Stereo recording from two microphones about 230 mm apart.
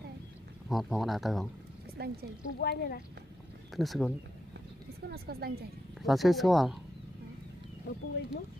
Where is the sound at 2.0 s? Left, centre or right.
Right.